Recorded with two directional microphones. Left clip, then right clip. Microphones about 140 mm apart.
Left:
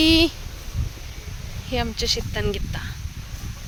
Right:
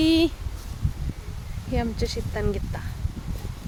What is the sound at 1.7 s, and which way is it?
Speech, 5° right (ahead or behind).